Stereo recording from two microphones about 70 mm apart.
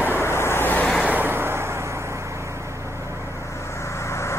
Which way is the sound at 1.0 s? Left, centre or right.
Right.